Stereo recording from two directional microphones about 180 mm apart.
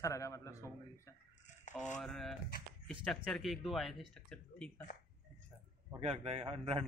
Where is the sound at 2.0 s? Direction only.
Centre (ahead or behind).